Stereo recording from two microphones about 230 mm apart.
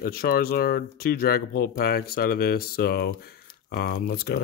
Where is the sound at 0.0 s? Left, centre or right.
Left.